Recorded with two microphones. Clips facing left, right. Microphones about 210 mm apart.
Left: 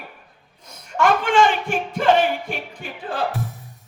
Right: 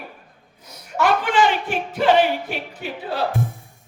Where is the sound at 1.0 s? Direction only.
50° left (ahead or behind).